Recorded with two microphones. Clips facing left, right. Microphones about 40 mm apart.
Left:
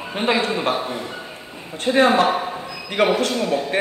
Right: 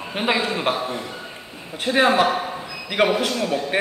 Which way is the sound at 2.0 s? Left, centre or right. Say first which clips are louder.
Left 1 dB; centre.